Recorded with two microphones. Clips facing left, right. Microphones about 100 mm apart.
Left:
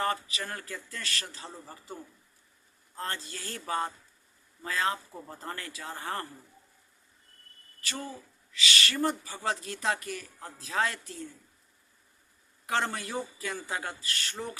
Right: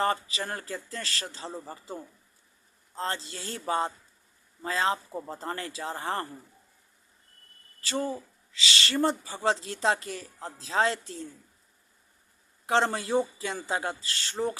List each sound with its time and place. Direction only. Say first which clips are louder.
0.0 s a man's voice: right 3 dB; 30° right (ahead or behind)
7.8 s speech: right 8 dB; 30° right (ahead or behind)
12.6 s speech: right 5 dB; 25° right (ahead or behind)